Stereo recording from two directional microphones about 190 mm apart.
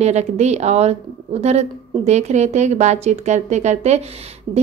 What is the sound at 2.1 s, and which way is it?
A woman's voice, 35° right (ahead or behind).